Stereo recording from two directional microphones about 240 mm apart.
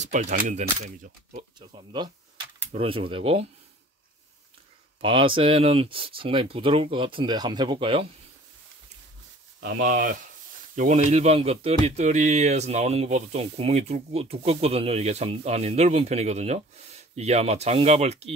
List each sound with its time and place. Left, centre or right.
0.0 s speech: right
5.0 s speech: right
9.6 s speech: right